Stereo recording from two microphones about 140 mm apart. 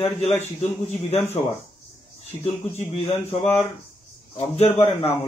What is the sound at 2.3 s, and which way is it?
A man's voice, 45° left (ahead or behind).